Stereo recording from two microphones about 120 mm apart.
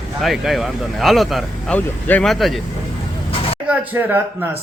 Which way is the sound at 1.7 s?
15° left (ahead or behind).